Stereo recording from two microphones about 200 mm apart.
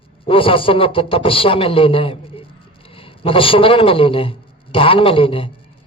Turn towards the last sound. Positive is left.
turn(degrees=25)  # may be behind; listen again after turning